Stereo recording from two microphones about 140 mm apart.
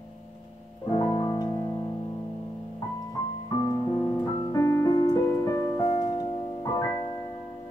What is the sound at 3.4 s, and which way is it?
Music, 35° left (ahead or behind).